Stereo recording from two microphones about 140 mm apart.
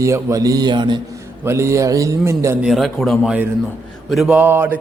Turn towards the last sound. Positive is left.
turn(degrees=-15)  # may be behind; listen again after turning